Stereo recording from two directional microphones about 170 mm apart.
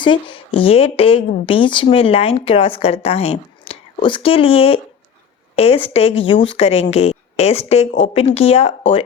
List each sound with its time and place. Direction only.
0.0 s a woman's voice: 30° left (ahead or behind)